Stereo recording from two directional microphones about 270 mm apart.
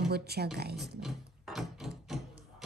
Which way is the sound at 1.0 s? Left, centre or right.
Centre.